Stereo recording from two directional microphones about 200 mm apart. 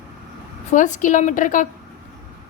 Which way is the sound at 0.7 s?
40° left (ahead or behind).